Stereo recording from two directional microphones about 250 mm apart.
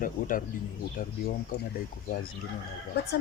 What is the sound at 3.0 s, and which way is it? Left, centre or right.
Speech, left.